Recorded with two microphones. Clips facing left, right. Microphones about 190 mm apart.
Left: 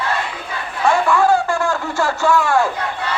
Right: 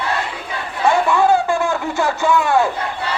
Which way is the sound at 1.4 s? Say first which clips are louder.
Right 1 dB; 20° right (ahead or behind).